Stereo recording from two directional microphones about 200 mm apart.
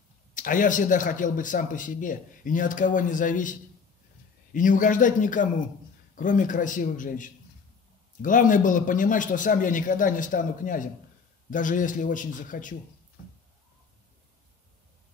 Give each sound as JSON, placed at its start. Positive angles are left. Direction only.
{"t": 0.3, "sound": "speech", "side_deg": 40}